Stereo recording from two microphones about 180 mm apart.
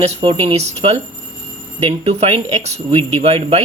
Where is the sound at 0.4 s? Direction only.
35° right (ahead or behind).